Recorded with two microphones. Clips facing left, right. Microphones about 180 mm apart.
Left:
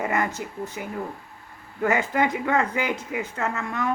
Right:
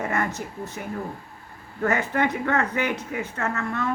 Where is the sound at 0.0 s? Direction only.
10° left (ahead or behind).